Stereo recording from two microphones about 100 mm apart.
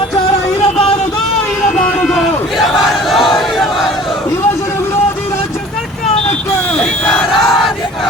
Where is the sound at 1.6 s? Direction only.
Centre (ahead or behind).